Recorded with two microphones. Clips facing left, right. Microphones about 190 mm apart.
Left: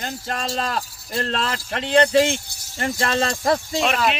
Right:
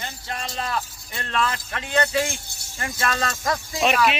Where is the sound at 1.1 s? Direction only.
35° left (ahead or behind).